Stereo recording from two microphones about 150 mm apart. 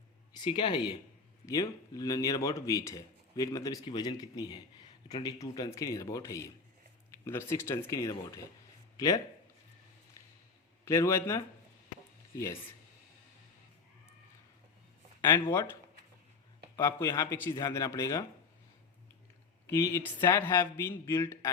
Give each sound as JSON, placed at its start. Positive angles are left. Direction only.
{"t": 0.3, "sound": "speech", "side_deg": 30}
{"t": 10.8, "sound": "speech", "side_deg": 20}
{"t": 15.2, "sound": "speech", "side_deg": 15}
{"t": 16.8, "sound": "speech", "side_deg": 20}
{"t": 19.6, "sound": "speech", "side_deg": 20}